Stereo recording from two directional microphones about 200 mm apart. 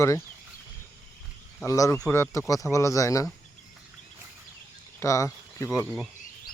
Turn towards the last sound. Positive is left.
turn(degrees=-5)  # may be behind; listen again after turning